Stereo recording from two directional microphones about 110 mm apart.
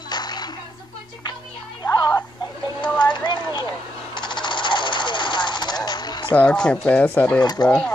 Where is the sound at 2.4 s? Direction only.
40° left (ahead or behind).